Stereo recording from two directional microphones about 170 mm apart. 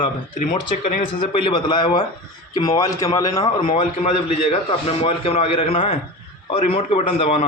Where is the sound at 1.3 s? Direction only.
30° left (ahead or behind).